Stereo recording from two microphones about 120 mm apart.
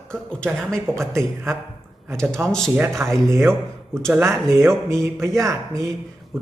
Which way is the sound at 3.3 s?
20° right (ahead or behind).